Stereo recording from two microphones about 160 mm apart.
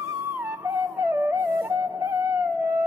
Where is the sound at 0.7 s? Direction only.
15° right (ahead or behind).